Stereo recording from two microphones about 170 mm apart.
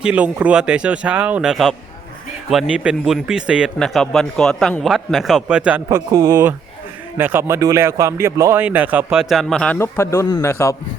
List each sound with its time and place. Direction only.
0.0 s speech: 10° right (ahead or behind)
6.1 s speech: 25° right (ahead or behind)
7.2 s speech: 10° right (ahead or behind)
9.7 s a man's voice: 15° left (ahead or behind)